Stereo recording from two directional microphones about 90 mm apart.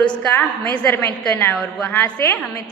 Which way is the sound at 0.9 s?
25° left (ahead or behind).